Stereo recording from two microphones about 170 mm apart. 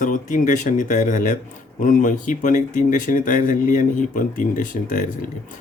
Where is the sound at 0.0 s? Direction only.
50° left (ahead or behind).